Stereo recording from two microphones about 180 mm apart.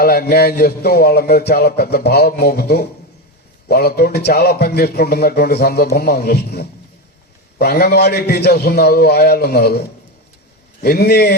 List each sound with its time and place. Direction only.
0.0 s a man's voice: 55° left (ahead or behind)
10.8 s a man's voice: 60° left (ahead or behind)